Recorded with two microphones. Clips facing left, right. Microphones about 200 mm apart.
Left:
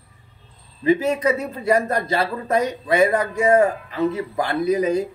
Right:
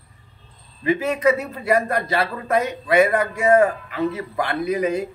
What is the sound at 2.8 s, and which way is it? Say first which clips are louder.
Speech: right 2 dB; 25° left (ahead or behind).